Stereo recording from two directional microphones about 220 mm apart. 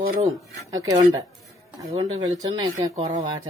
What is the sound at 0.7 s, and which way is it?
Speech, 15° right (ahead or behind).